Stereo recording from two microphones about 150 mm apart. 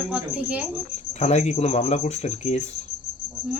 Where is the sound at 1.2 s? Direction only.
50° left (ahead or behind).